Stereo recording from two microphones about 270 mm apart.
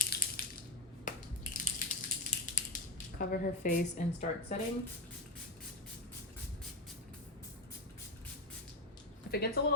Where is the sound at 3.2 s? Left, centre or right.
Left.